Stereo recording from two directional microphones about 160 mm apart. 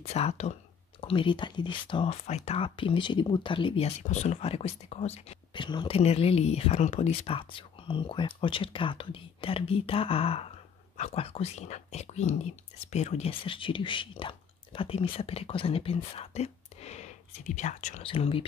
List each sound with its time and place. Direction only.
0.0 s speech: 40° left (ahead or behind)
1.0 s speech: 30° left (ahead or behind)
2.2 s speech: 40° left (ahead or behind)
18.0 s speech: 35° left (ahead or behind)